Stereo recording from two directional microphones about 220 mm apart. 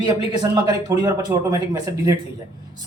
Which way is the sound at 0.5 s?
15° right (ahead or behind).